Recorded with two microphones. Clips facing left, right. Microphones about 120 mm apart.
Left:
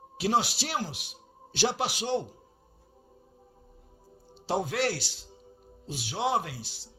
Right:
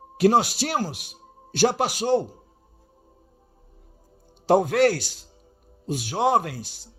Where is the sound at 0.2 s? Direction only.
50° right (ahead or behind).